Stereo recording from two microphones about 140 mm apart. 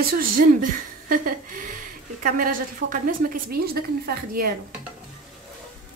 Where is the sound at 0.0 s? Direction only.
85° right.